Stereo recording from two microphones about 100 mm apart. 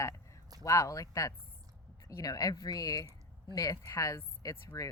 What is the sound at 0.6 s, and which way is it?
A woman's voice, 30° left (ahead or behind).